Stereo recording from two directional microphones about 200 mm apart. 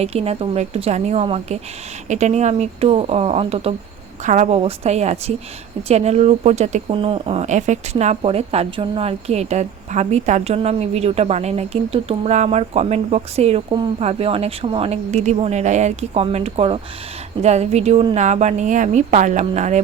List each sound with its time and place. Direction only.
0.0 s speech: 30° right (ahead or behind)